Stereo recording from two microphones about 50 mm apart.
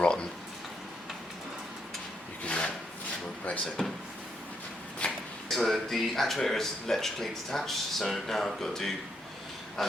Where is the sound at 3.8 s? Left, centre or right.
Centre.